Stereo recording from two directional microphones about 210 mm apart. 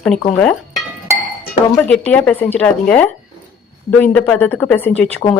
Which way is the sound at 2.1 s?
5° left (ahead or behind).